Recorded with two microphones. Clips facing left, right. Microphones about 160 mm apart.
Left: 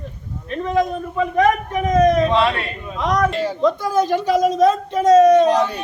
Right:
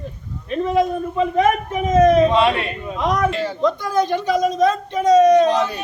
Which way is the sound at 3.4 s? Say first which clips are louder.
Left 2 dB; 5° left (ahead or behind).